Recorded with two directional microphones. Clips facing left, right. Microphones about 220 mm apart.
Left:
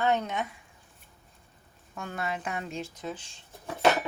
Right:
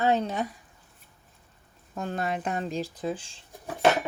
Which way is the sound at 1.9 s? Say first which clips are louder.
Right 4 dB; 35° right (ahead or behind).